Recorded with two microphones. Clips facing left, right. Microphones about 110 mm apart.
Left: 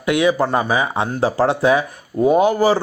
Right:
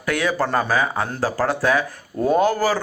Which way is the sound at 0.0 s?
20° left (ahead or behind).